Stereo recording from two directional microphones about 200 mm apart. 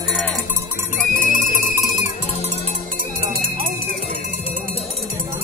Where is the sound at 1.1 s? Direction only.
45° left (ahead or behind).